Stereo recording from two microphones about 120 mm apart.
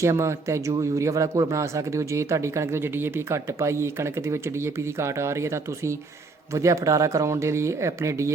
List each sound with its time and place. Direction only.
0.0 s speech: 25° right (ahead or behind)